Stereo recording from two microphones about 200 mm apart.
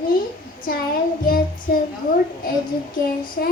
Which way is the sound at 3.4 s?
50° left (ahead or behind).